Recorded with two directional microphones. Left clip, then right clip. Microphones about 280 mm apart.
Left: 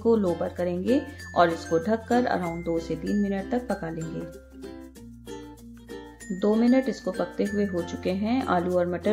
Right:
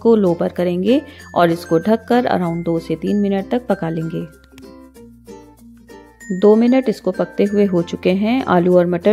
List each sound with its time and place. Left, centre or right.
0.0 s speech: right
6.4 s speech: right